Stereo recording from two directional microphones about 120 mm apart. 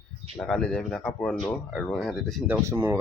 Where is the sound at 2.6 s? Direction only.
20° right (ahead or behind).